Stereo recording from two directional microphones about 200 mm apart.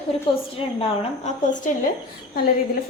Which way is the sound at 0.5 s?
30° left (ahead or behind).